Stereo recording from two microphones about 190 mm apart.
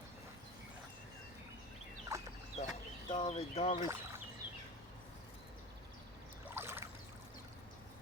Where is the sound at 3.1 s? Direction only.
35° left (ahead or behind).